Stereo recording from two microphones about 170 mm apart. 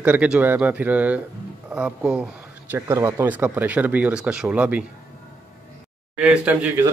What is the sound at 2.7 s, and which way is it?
Speech, 15° right (ahead or behind).